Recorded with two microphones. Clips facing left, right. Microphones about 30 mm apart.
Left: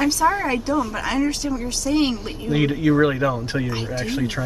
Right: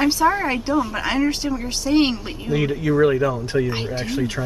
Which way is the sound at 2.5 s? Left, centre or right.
Centre.